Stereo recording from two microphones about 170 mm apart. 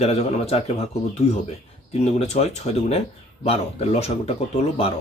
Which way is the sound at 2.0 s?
40° left (ahead or behind).